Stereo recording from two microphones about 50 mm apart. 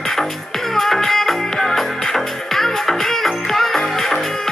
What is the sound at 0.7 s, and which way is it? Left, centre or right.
Music, centre.